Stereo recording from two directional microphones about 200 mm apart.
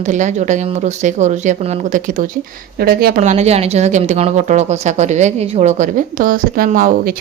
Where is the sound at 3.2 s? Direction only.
35° right (ahead or behind).